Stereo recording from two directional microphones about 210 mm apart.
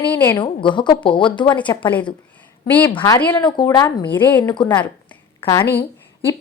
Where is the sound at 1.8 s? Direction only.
5° left (ahead or behind).